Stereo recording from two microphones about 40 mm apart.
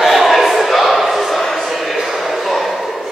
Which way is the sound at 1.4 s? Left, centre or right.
Centre.